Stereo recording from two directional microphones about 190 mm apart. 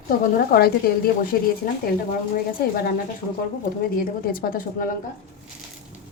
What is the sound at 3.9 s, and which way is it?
Speech, 50° left (ahead or behind).